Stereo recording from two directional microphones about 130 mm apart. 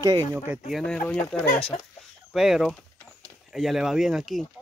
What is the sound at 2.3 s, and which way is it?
Speech, centre (ahead or behind).